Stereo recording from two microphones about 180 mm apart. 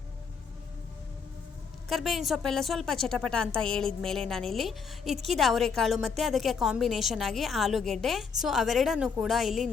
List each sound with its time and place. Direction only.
1.9 s a woman's voice: centre (ahead or behind)